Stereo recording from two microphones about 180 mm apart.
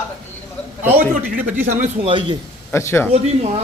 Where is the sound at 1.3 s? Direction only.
10° right (ahead or behind).